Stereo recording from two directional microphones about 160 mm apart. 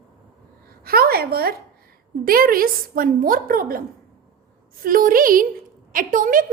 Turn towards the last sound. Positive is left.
turn(degrees=-55)  # may be behind; listen again after turning